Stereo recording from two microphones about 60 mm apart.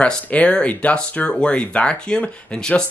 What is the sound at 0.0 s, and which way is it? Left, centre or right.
Speech, left.